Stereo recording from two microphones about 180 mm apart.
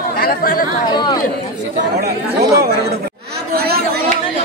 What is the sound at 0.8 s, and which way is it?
Speech, 25° left (ahead or behind).